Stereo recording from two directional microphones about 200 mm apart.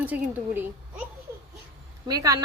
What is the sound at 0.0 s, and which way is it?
Speech, 10° right (ahead or behind).